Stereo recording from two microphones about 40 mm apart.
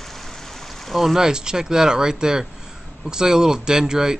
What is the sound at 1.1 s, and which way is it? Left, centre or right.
Speech, centre.